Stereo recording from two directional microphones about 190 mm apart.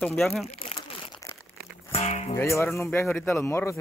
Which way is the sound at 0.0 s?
5° left (ahead or behind).